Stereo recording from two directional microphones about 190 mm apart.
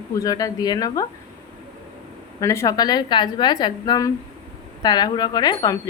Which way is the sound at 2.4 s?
15° left (ahead or behind).